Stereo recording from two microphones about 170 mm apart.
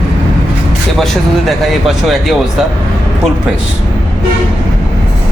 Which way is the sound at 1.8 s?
Centre (ahead or behind).